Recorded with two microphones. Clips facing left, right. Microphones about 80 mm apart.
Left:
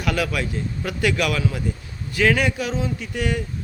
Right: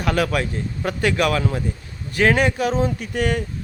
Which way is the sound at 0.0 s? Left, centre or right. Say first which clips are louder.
Right 3 dB; right.